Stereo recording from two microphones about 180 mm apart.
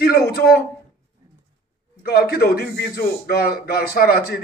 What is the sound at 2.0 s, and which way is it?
A man's voice, 60° left (ahead or behind).